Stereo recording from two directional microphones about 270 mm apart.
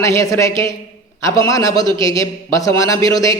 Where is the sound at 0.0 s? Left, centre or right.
Centre.